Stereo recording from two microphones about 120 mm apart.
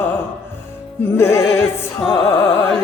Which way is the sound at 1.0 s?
20° left (ahead or behind).